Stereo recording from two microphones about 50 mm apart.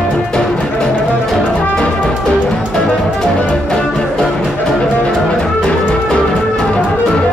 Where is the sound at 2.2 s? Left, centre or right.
Centre.